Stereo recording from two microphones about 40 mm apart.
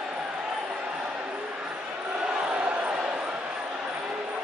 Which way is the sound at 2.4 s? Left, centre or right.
Right.